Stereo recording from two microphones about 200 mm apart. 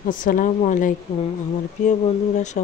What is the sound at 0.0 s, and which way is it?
Speech, 45° left (ahead or behind).